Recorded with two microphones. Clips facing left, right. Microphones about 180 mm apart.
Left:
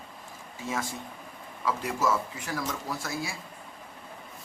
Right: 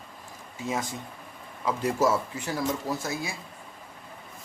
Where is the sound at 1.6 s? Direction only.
25° right (ahead or behind).